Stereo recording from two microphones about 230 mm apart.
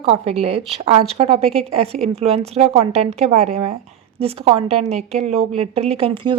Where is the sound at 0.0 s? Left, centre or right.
Right.